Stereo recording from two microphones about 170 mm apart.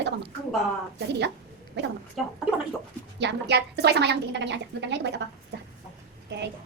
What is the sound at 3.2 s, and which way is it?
A woman's voice, 85° right.